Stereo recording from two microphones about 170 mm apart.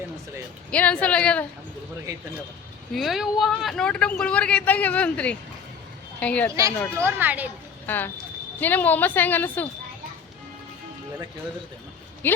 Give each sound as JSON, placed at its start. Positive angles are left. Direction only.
{"t": 0.7, "sound": "speech", "side_deg": 5}
{"t": 2.9, "sound": "speech", "side_deg": 0}
{"t": 6.5, "sound": "a child's voice", "side_deg": -20}
{"t": 7.9, "sound": "speech", "side_deg": 10}
{"t": 12.2, "sound": "speech", "side_deg": 10}